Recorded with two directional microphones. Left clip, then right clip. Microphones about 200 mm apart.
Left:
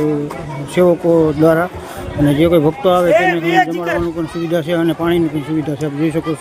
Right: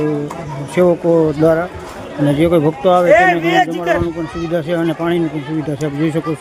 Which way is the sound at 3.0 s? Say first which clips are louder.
Right 2 dB; 30° right (ahead or behind).